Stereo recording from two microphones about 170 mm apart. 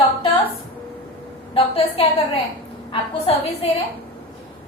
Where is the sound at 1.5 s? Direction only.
35° left (ahead or behind).